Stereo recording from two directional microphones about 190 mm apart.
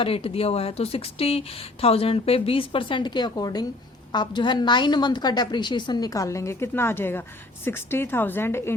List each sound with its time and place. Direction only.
0.0 s a woman's voice: 30° left (ahead or behind); by 8.7 s 10° left (ahead or behind)